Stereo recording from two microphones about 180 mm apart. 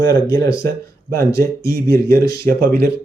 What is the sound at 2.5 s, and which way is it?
Speech, 55° right (ahead or behind).